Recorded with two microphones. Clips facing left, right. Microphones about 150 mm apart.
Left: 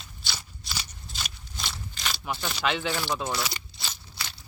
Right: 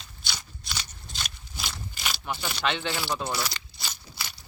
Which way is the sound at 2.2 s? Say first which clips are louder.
Left 1 dB; centre (ahead or behind).